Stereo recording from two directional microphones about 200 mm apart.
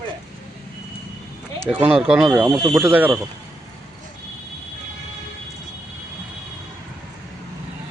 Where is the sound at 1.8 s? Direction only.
5° right (ahead or behind).